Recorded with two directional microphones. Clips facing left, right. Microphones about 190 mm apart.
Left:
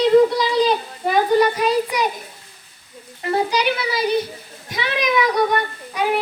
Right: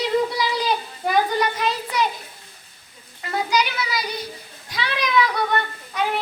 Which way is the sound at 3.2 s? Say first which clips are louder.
Left 3 dB; 30° left (ahead or behind).